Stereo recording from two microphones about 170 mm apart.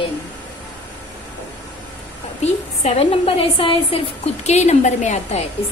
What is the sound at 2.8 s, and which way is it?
A woman's voice, 35° left (ahead or behind).